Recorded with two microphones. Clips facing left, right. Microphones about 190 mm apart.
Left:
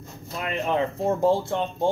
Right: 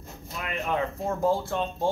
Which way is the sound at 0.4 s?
30° left (ahead or behind).